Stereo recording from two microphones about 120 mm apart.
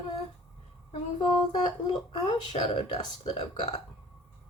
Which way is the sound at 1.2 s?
40° left (ahead or behind).